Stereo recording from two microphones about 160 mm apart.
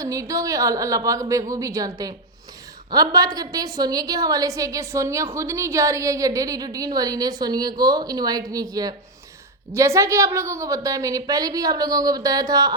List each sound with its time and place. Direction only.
0.0 s a woman's voice: 20° right (ahead or behind)